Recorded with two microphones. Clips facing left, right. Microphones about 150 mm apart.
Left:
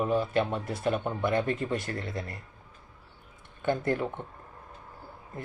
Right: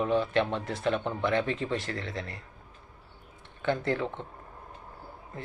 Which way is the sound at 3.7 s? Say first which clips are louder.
Left 1 dB; 10° left (ahead or behind).